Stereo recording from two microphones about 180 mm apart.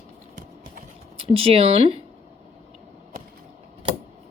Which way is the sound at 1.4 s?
30° right (ahead or behind).